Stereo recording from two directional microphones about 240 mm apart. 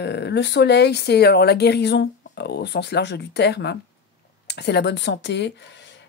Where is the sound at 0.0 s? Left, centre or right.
Left.